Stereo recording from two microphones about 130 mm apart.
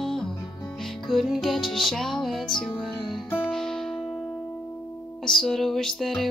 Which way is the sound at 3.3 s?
15° left (ahead or behind).